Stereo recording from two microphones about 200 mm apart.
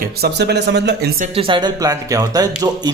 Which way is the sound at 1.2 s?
30° right (ahead or behind).